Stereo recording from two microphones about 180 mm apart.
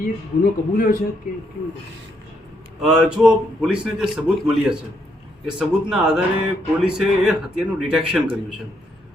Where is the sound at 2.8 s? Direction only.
Centre (ahead or behind).